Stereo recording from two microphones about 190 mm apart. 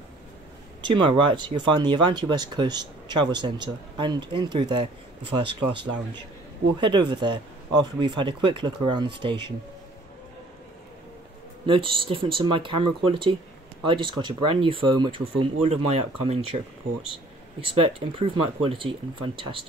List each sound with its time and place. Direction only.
0.8 s speech: 25° right (ahead or behind)
6.8 s speech: 25° right (ahead or behind)
11.6 s speech: 25° right (ahead or behind)